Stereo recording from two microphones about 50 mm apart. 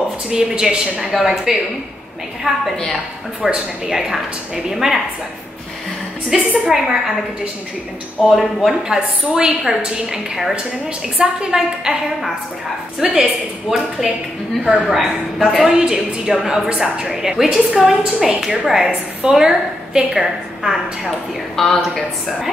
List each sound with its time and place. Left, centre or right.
0.3 s a woman's voice: centre
3.4 s a woman's voice: centre
6.3 s a woman's voice: centre
8.2 s a woman's voice: centre
13.0 s a woman's voice: centre
21.5 s a woman's voice: centre